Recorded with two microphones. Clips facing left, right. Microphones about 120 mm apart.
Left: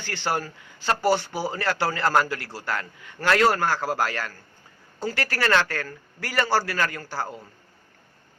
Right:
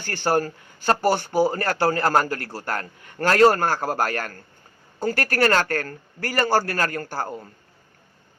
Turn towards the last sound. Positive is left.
turn(degrees=-50)  # may be behind; listen again after turning